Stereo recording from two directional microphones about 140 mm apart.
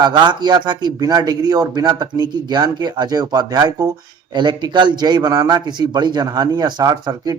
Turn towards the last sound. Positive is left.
turn(degrees=-30)  # may be behind; listen again after turning